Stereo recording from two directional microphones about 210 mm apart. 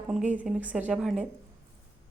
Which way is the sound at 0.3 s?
5° right (ahead or behind).